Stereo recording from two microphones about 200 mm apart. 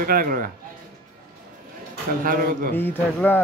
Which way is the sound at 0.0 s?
45° right (ahead or behind).